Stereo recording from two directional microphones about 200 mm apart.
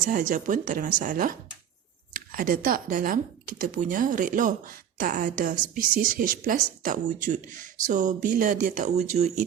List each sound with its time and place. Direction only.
0.0 s a woman's voice: 45° right (ahead or behind)